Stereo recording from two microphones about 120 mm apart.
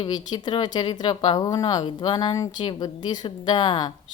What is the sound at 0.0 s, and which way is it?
A woman's voice, 35° left (ahead or behind).